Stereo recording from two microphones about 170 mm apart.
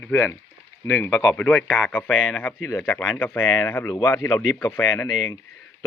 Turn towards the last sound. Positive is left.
turn(degrees=15)  # may be behind; listen again after turning